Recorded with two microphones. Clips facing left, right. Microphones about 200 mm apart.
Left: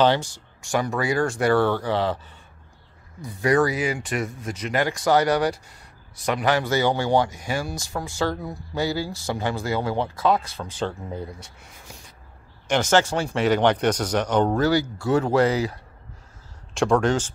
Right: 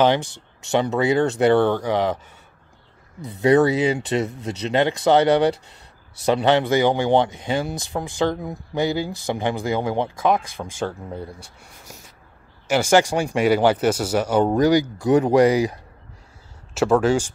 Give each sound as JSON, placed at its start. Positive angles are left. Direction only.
{"t": 0.0, "sound": "speech", "side_deg": -15}
{"t": 3.3, "sound": "speech", "side_deg": -25}
{"t": 10.8, "sound": "speech", "side_deg": 0}
{"t": 11.3, "sound": "speech", "side_deg": -40}
{"t": 12.6, "sound": "speech", "side_deg": -10}